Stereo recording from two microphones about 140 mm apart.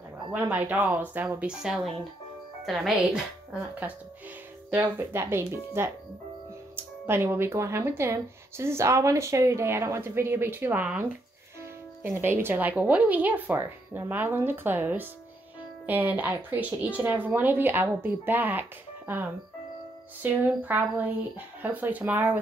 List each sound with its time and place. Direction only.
0.3 s speech: 15° right (ahead or behind)
4.7 s speech: 15° right (ahead or behind)
7.1 s speech: 15° right (ahead or behind)